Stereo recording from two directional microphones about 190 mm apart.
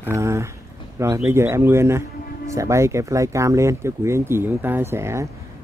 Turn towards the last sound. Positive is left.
turn(degrees=-15)  # may be behind; listen again after turning